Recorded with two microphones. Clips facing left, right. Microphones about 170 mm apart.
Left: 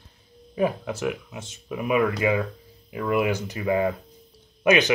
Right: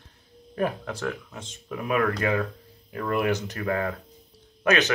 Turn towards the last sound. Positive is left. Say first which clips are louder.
# left 3 dB
turn(degrees=10)  # may be behind; listen again after turning